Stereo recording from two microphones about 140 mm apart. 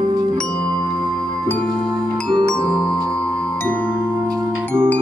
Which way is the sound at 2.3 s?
30° right (ahead or behind).